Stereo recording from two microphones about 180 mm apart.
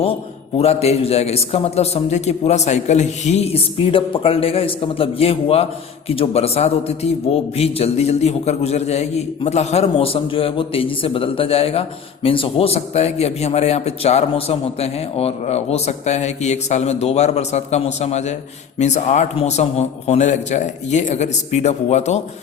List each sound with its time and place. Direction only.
0.0 s a man's voice: 30° left (ahead or behind)